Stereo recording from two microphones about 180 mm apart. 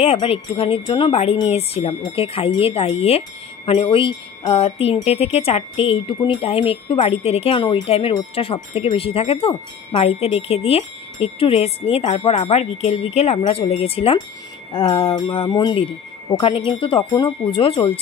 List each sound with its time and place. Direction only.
0.0 s speech: 35° left (ahead or behind)